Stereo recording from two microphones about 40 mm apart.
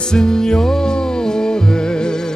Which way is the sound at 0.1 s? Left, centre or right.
Centre.